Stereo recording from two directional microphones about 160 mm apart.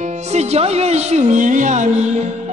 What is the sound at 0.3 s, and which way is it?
Music, 40° right (ahead or behind).